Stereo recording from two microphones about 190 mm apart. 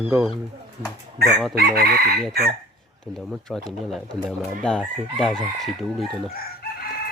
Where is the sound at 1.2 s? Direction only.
5° right (ahead or behind).